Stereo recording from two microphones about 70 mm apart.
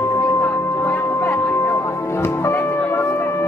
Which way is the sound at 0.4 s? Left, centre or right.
Left.